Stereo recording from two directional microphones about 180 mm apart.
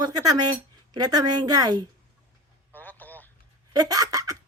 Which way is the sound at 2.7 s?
10° left (ahead or behind).